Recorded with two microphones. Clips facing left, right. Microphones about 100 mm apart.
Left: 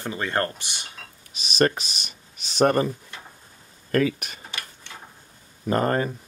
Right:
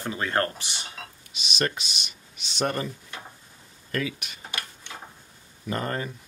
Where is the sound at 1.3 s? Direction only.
40° left (ahead or behind).